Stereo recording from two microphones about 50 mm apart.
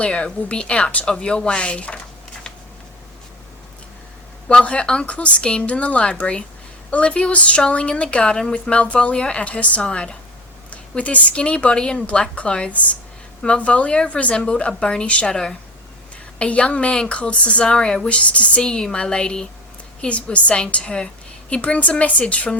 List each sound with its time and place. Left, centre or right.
0.0 s a woman's voice: left
4.4 s a woman's voice: left